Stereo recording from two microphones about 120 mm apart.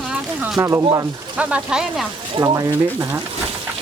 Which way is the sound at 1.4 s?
10° right (ahead or behind).